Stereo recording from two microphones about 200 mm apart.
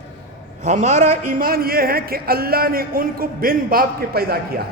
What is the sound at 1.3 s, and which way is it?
Speech, 45° right (ahead or behind).